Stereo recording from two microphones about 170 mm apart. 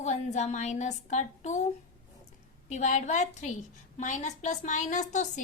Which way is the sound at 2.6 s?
45° left (ahead or behind).